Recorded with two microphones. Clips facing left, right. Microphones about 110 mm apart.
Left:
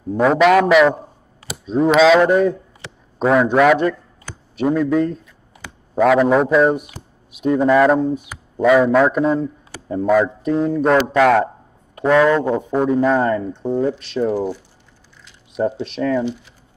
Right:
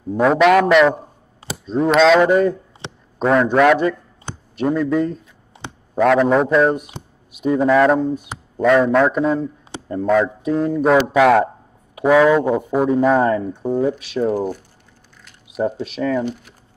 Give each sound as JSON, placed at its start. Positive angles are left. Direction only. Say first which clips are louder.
{"t": 0.1, "sound": "speech", "louder": "even", "side_deg": 0}
{"t": 2.8, "sound": "a sound", "louder": "right 5 dB", "side_deg": -25}
{"t": 3.2, "sound": "speech", "louder": "even", "side_deg": 0}
{"t": 5.5, "sound": "a sound", "louder": "right 4 dB", "side_deg": -25}
{"t": 5.9, "sound": "speech", "louder": "left 1 dB", "side_deg": 0}
{"t": 15.8, "sound": "speech", "louder": "left 1 dB", "side_deg": 0}
{"t": 16.2, "sound": "speech", "louder": "left 1 dB", "side_deg": -50}